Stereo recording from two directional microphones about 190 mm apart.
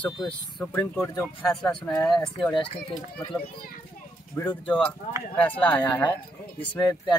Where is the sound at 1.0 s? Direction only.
10° left (ahead or behind).